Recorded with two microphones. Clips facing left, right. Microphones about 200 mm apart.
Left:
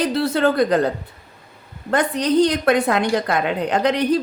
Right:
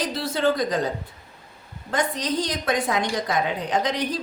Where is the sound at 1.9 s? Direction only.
60° left (ahead or behind).